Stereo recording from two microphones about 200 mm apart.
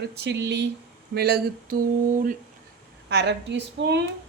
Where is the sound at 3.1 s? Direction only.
55° right (ahead or behind).